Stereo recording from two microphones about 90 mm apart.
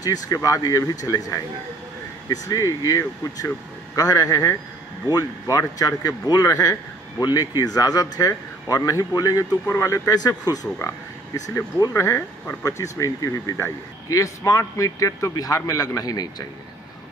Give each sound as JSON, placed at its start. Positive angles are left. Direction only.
{"t": 0.0, "sound": "speech", "side_deg": 40}
{"t": 11.9, "sound": "speech", "side_deg": 30}